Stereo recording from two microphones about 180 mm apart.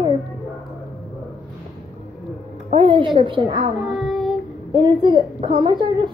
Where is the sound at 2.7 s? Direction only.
30° right (ahead or behind).